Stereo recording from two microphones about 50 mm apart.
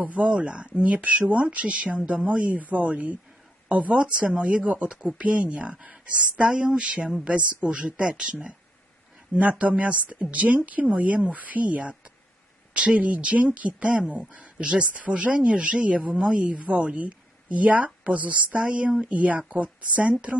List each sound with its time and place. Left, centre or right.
0.0 s speech: right